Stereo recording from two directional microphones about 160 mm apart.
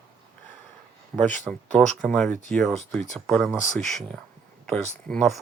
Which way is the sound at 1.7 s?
5° left (ahead or behind).